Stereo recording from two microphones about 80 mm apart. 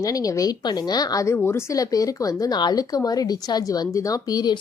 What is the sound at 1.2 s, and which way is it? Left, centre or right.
Speech, left.